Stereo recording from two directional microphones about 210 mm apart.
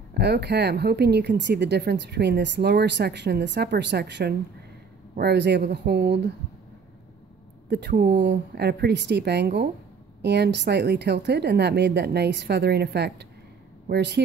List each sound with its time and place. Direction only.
0.1 s speech: 50° right (ahead or behind)
7.7 s speech: 50° right (ahead or behind)